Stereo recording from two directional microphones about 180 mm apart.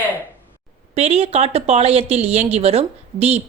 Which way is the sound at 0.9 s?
35° right (ahead or behind).